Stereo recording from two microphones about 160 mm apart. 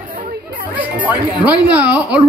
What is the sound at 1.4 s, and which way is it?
Speech, 10° right (ahead or behind).